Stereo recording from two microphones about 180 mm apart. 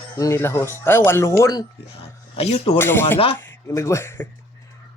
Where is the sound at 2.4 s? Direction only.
35° left (ahead or behind).